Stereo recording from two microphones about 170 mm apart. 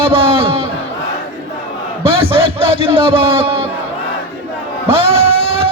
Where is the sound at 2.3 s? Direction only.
35° right (ahead or behind).